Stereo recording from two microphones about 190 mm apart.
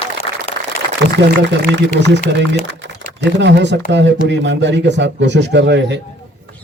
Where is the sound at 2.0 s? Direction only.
65° right (ahead or behind).